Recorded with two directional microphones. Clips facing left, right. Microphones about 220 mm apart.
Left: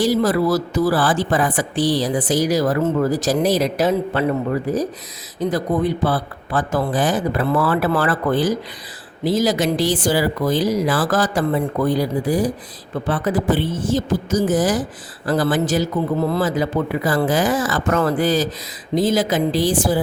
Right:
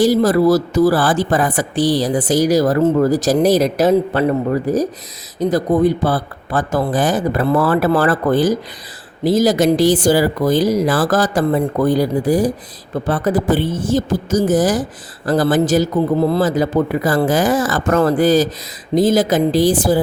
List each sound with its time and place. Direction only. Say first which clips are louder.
0.0 s speech: right 5 dB; 40° right (ahead or behind)